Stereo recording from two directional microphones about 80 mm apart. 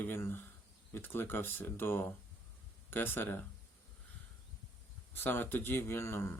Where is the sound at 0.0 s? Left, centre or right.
Left.